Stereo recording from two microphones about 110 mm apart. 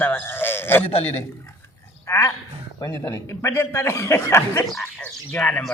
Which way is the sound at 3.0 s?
25° left (ahead or behind).